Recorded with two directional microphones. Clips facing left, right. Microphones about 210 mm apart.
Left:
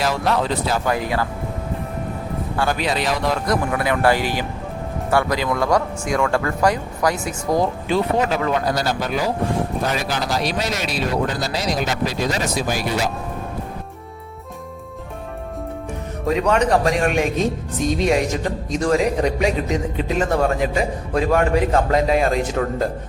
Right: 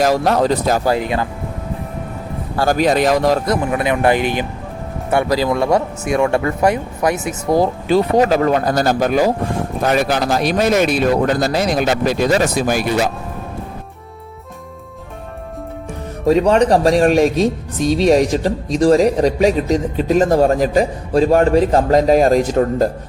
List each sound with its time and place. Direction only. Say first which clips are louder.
0.0 s speech: right 6 dB; 45° right (ahead or behind)
0.9 s speech: right 4 dB; 20° right (ahead or behind)
2.6 s speech: right 8 dB; 45° right (ahead or behind)
3.5 s speech: right 3 dB; 20° right (ahead or behind); by 13.1 s 55° right (ahead or behind)
16.2 s speech: right 6 dB; 30° right (ahead or behind)